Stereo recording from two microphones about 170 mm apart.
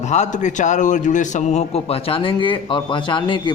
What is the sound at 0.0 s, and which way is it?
A man's voice, 45° left (ahead or behind).